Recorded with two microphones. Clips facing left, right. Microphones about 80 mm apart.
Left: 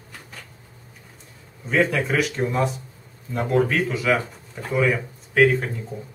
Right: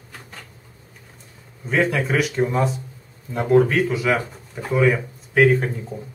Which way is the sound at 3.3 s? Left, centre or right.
Centre.